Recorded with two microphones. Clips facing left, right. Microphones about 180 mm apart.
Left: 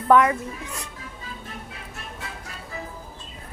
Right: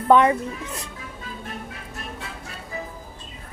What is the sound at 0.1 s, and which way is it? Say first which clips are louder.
Speech: right 1 dB; 25° right (ahead or behind).